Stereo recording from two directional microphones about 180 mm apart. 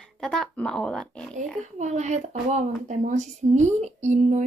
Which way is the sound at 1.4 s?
40° right (ahead or behind).